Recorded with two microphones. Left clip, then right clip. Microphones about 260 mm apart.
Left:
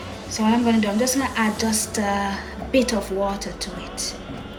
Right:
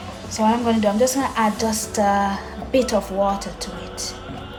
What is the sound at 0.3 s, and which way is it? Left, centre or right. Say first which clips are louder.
A woman's voice: right 2 dB; right.